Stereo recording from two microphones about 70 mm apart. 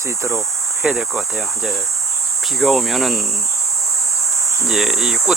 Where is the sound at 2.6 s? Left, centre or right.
Centre.